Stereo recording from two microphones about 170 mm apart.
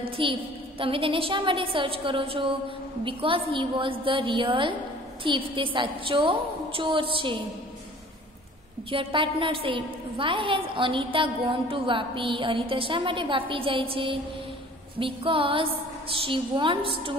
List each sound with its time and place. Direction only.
0.2 s a woman's voice: 30° right (ahead or behind)
8.9 s a woman's voice: 30° right (ahead or behind)